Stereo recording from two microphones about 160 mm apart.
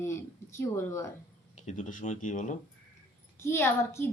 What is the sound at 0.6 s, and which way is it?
Speech, 15° left (ahead or behind).